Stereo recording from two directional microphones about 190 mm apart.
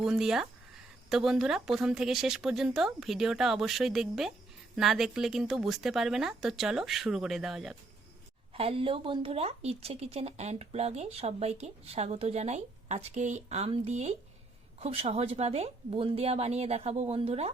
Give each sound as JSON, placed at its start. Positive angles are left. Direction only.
{"t": 0.0, "sound": "a woman's voice", "side_deg": -5}
{"t": 8.5, "sound": "a woman's voice", "side_deg": -30}